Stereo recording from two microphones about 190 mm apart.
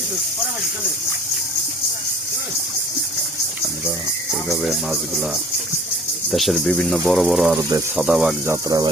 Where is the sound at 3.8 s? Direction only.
5° right (ahead or behind).